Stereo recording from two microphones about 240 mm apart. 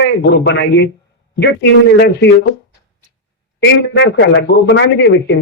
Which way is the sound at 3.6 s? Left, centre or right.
Left.